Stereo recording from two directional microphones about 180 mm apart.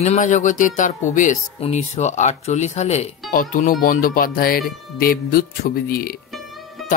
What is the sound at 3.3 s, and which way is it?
Speech, 50° left (ahead or behind).